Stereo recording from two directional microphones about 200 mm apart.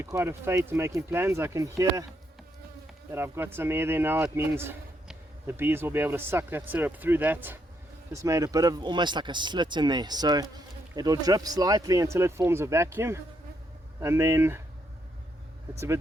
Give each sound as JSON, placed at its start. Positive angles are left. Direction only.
{"t": 0.0, "sound": "speech", "side_deg": -10}
{"t": 3.1, "sound": "speech", "side_deg": -10}